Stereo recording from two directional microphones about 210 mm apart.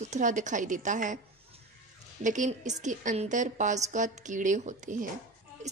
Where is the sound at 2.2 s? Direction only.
35° right (ahead or behind).